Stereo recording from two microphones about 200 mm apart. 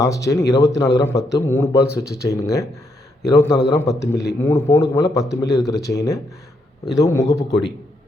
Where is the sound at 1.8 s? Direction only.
50° left (ahead or behind).